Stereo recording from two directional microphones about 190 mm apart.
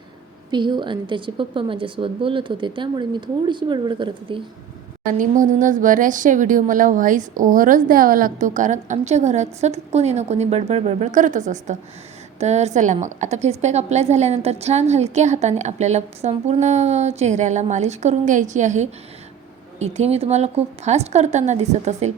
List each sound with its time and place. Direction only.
0.5 s a woman's voice: 25° right (ahead or behind)
5.1 s a woman's voice: 45° right (ahead or behind)